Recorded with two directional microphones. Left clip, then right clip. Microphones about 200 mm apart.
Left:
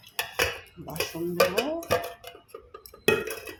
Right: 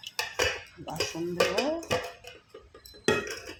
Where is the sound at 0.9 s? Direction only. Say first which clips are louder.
Left 2 dB; 55° left (ahead or behind).